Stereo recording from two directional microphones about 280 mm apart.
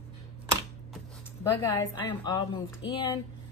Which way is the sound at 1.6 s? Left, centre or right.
Centre.